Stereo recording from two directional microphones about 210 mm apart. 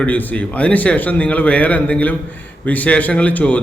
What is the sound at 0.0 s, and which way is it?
Speech, 5° left (ahead or behind).